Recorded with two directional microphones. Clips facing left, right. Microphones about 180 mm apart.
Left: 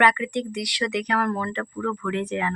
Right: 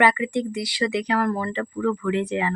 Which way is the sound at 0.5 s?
Centre (ahead or behind).